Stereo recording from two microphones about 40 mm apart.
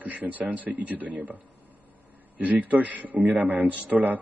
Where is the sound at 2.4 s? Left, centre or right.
Right.